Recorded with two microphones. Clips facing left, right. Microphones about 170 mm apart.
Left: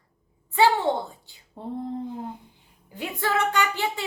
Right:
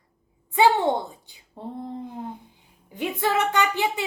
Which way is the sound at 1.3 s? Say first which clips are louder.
Right 1 dB; 20° right (ahead or behind).